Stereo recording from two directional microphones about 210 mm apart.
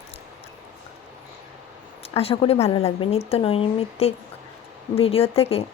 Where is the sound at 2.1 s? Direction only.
30° left (ahead or behind).